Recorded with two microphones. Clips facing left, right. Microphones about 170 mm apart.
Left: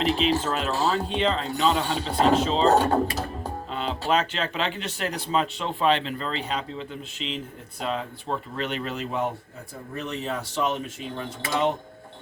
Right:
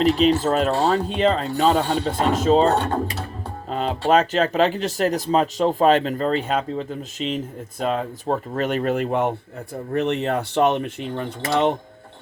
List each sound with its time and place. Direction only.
0.0 s speech: 40° right (ahead or behind)
3.7 s speech: 45° right (ahead or behind); by 9.3 s 60° right (ahead or behind)
9.9 s mechanisms: 65° right (ahead or behind)